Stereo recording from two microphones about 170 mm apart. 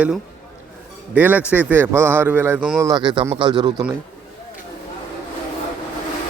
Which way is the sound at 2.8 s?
25° right (ahead or behind).